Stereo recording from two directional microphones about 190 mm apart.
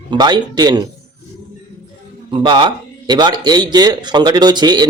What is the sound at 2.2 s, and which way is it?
Speech, 25° right (ahead or behind).